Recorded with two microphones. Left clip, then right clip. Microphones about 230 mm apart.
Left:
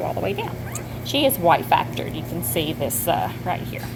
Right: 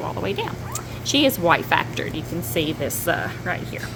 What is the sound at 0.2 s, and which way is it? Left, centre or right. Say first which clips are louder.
A woman's voice: even; centre.